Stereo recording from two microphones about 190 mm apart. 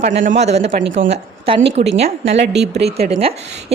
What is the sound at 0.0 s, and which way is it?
Speech, 35° right (ahead or behind).